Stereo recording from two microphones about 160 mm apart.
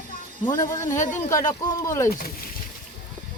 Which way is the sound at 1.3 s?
20° left (ahead or behind).